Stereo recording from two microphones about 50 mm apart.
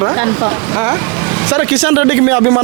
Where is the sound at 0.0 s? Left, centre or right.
Right.